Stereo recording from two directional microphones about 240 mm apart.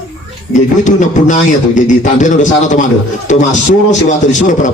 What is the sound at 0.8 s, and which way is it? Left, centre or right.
A man's voice, left.